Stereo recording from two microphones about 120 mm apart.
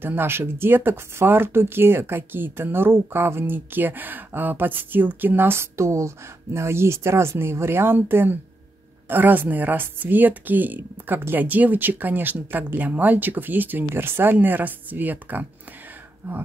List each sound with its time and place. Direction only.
0.0 s speech: 20° right (ahead or behind)